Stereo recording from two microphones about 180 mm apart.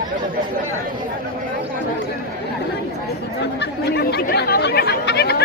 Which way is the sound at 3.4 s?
70° left (ahead or behind).